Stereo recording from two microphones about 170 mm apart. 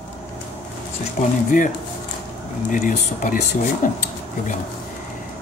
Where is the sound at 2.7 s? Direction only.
50° left (ahead or behind).